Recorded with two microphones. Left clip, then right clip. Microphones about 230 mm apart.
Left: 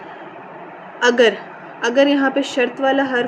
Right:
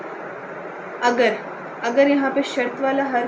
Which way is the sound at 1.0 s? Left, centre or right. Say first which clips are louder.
Left 4 dB; left.